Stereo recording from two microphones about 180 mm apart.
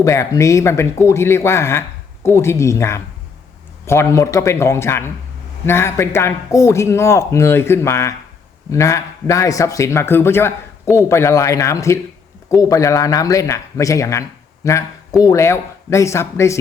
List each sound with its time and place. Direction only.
0.0 s a man's voice: 15° left (ahead or behind)